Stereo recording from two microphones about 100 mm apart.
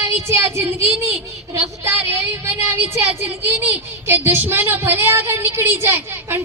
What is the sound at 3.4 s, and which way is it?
A woman's voice, 20° right (ahead or behind).